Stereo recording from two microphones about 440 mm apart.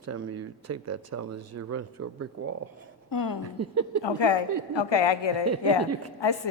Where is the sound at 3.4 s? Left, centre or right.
Right.